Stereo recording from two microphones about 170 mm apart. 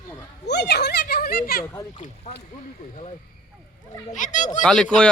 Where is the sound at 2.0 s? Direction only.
40° left (ahead or behind).